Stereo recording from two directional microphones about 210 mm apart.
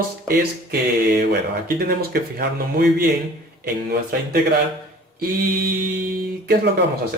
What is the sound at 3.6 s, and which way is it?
Speech, 45° right (ahead or behind).